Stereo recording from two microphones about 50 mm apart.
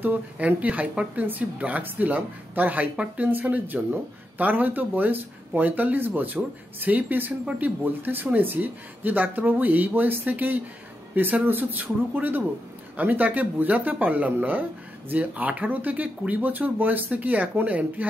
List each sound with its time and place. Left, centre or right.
0.0 s speech: right